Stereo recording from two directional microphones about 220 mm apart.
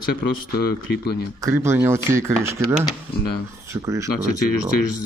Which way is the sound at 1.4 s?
10° right (ahead or behind).